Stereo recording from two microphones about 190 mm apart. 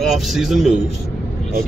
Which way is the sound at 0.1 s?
Centre (ahead or behind).